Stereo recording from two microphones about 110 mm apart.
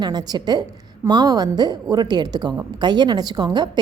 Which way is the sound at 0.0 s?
40° right (ahead or behind).